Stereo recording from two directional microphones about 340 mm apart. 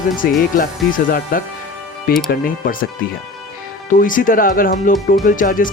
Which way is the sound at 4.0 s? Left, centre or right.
Left.